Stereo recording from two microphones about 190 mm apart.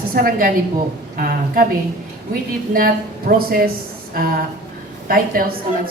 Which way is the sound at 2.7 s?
50° right (ahead or behind).